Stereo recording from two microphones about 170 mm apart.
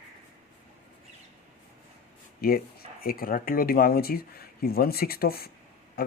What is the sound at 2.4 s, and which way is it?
Speech, 60° left (ahead or behind).